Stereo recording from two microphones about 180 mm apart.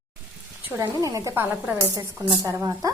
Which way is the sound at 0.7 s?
15° right (ahead or behind).